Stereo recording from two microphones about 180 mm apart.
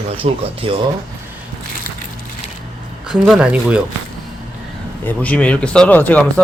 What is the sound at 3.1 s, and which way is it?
Speech, 5° right (ahead or behind).